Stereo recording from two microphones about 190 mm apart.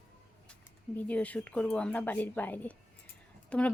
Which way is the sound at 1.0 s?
5° left (ahead or behind).